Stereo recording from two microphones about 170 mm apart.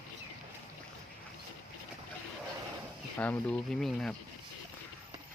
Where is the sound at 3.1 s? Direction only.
10° left (ahead or behind).